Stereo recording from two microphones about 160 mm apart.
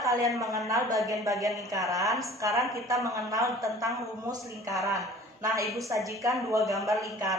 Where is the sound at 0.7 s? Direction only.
20° right (ahead or behind).